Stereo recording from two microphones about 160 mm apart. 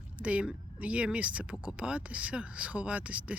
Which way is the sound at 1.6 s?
5° right (ahead or behind).